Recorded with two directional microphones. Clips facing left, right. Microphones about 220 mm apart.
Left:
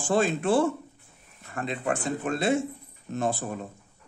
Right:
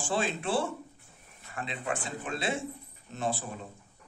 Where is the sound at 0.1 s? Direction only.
45° left (ahead or behind).